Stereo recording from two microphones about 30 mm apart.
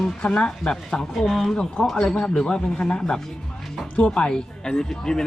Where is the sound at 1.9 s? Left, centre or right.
Left.